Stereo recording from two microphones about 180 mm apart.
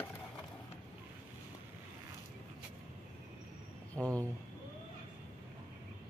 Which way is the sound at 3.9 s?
15° right (ahead or behind).